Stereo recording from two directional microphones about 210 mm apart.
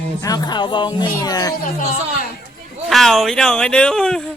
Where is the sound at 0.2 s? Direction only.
20° left (ahead or behind).